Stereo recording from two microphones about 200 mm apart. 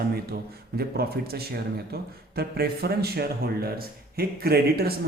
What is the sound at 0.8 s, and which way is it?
Speech, 50° right (ahead or behind).